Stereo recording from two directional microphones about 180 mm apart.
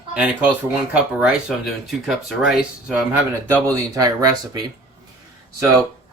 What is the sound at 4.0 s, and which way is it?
Speech, 20° right (ahead or behind).